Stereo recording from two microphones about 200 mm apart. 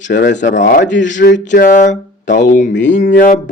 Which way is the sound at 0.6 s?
40° left (ahead or behind).